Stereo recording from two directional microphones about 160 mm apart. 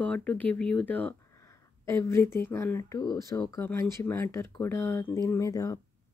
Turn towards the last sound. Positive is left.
turn(degrees=20)  # may be behind; listen again after turning